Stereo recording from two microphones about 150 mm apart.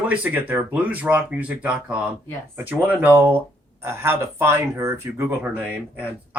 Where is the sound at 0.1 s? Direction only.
10° right (ahead or behind).